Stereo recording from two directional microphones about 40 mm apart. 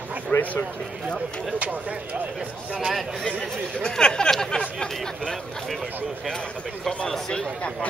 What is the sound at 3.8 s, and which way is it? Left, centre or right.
Speech, left.